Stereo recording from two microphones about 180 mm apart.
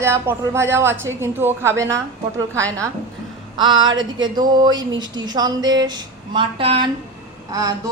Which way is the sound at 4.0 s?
25° right (ahead or behind).